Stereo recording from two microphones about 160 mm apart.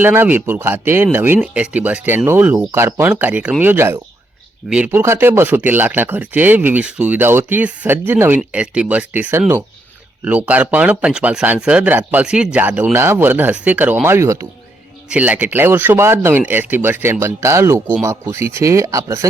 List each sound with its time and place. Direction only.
0.0 s speech: 10° right (ahead or behind)